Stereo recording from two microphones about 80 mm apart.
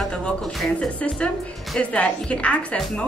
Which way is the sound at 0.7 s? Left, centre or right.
Centre.